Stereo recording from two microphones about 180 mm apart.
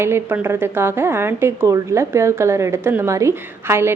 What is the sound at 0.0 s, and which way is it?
Speech, 15° right (ahead or behind).